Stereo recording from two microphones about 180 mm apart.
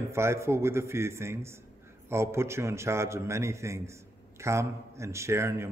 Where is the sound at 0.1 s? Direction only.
15° right (ahead or behind).